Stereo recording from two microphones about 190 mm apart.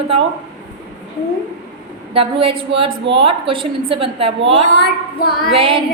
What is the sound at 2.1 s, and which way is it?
A woman's voice, 30° right (ahead or behind).